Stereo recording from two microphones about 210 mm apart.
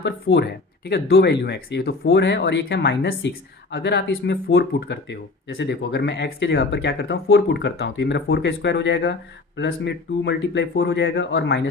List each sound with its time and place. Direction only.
0.0 s speech: 55° left (ahead or behind)